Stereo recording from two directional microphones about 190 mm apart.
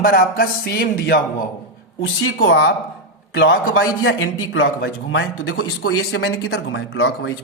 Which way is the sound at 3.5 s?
90° left.